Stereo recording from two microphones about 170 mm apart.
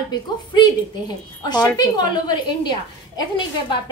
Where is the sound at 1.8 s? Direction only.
25° left (ahead or behind).